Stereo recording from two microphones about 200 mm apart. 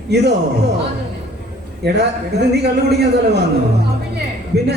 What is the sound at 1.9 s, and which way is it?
A man's voice, 55° right (ahead or behind).